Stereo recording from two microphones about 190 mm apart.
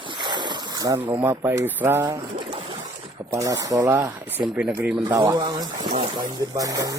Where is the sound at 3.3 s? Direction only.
15° right (ahead or behind).